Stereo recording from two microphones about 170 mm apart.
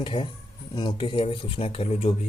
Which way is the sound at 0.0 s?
30° left (ahead or behind).